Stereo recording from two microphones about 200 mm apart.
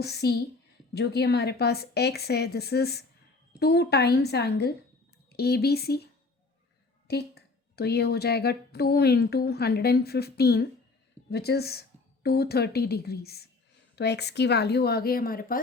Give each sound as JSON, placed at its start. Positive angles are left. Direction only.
{"t": 0.0, "sound": "speech", "side_deg": 55}
{"t": 7.1, "sound": "a woman's voice", "side_deg": 55}